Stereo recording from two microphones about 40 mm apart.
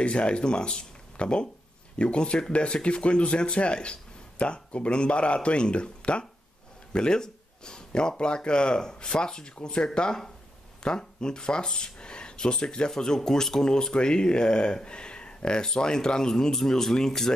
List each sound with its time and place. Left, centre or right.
0.0 s speech: left; by 17.3 s centre